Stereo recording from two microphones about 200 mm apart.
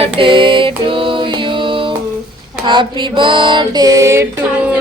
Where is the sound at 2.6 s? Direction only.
25° right (ahead or behind).